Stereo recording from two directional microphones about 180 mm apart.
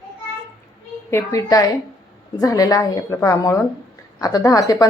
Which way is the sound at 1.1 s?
20° left (ahead or behind).